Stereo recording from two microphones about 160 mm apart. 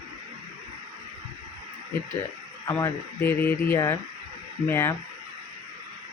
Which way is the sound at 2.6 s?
15° left (ahead or behind).